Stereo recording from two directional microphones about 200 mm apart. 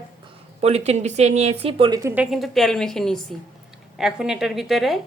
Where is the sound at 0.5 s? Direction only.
30° right (ahead or behind).